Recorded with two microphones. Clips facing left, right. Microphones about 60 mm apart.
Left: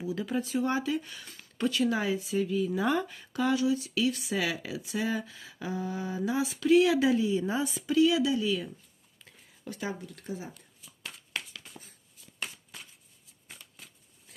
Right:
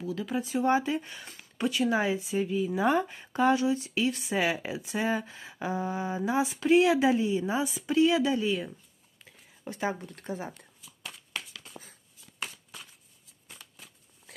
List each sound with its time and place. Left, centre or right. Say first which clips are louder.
0.0 s speech: even; centre
0.4 s speech: right 6 dB; right
1.4 s speech: even; centre
10.0 s speech: right 2 dB; right